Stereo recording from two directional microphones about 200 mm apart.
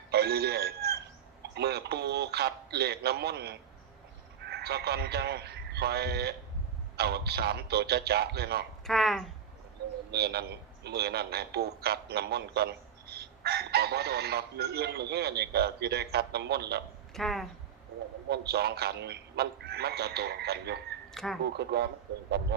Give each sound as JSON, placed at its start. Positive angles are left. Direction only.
{"t": 0.1, "sound": "telephone bell ringing", "side_deg": -50}
{"t": 1.5, "sound": "a man's voice", "side_deg": -55}
{"t": 8.9, "sound": "speech", "side_deg": 0}
{"t": 10.1, "sound": "a man's voice", "side_deg": -55}
{"t": 17.2, "sound": "speech", "side_deg": 0}
{"t": 18.3, "sound": "a man's voice", "side_deg": -55}
{"t": 21.1, "sound": "speech", "side_deg": 0}
{"t": 21.4, "sound": "a man's voice", "side_deg": -55}